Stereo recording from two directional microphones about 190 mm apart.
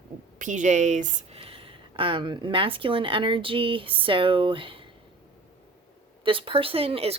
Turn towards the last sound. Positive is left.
turn(degrees=-30)  # may be behind; listen again after turning